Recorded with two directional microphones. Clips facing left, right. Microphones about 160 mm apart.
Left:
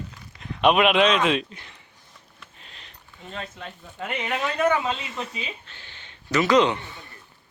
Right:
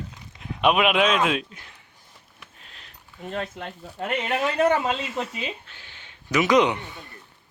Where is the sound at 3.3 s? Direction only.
45° right (ahead or behind).